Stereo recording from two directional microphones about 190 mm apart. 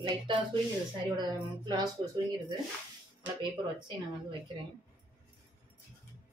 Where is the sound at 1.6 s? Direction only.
20° right (ahead or behind).